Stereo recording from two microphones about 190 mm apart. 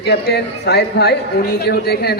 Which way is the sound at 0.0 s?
60° left (ahead or behind).